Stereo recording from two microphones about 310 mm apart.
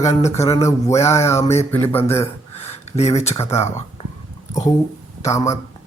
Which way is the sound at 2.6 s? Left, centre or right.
Left.